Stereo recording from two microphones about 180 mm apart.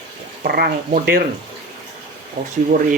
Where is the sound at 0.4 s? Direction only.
60° right (ahead or behind).